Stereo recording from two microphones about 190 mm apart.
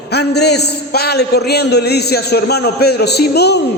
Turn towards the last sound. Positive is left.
turn(degrees=60)  # may be behind; listen again after turning